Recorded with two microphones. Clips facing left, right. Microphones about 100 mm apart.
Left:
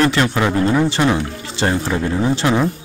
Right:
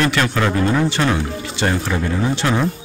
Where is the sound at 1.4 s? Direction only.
30° left (ahead or behind).